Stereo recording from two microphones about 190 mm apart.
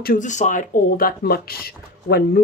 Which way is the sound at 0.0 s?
45° left (ahead or behind).